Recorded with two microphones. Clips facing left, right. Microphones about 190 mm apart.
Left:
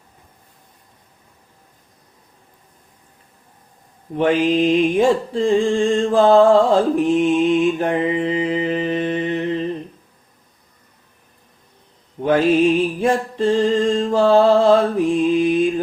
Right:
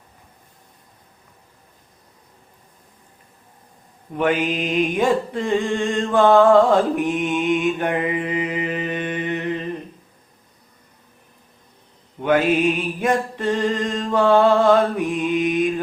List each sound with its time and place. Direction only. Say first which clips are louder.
4.2 s mantra: left 5 dB; 30° left (ahead or behind)
12.2 s music: left 3 dB; 30° left (ahead or behind)